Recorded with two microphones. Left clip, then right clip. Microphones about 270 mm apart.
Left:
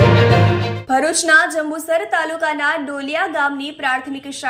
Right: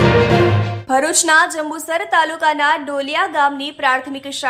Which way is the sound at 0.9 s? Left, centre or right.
Centre.